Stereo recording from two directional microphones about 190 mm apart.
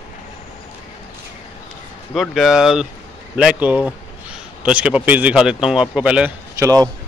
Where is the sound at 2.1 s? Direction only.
Centre (ahead or behind); by 6.8 s 15° right (ahead or behind).